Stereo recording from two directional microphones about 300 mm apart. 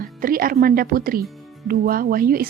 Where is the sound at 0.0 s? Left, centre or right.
Right.